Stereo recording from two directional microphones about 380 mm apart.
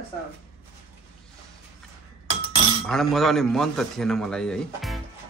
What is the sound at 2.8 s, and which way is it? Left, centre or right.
A man's voice, centre.